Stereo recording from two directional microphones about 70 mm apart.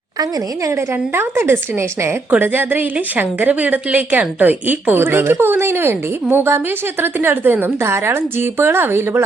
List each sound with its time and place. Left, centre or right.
0.7 s a woman's voice: right